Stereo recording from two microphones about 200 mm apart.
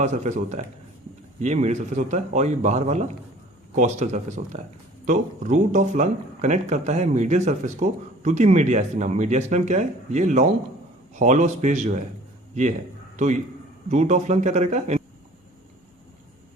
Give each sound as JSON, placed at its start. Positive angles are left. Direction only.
{"t": 0.0, "sound": "speech", "side_deg": -35}
{"t": 13.1, "sound": "a man's voice", "side_deg": -35}